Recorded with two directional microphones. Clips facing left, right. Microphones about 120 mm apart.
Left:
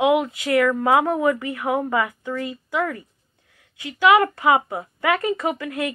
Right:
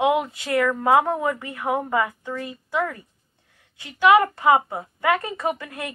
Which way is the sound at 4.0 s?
25° right (ahead or behind).